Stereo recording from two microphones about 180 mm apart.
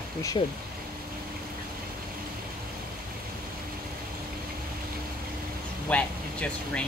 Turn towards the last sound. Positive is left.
turn(degrees=5)  # may be behind; listen again after turning